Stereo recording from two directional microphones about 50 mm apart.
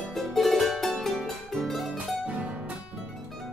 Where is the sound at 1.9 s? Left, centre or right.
Right.